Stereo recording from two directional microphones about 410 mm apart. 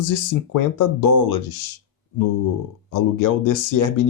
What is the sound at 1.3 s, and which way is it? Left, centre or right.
Speech, left.